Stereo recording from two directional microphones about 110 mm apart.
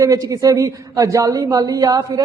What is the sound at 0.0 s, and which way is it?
A woman's voice, 30° right (ahead or behind).